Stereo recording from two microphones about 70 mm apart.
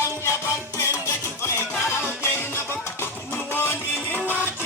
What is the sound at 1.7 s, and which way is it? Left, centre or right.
Music, left.